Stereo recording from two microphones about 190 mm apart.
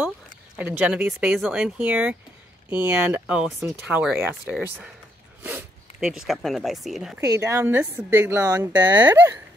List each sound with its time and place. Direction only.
0.6 s speech: 5° right (ahead or behind)
7.2 s speech: 15° right (ahead or behind)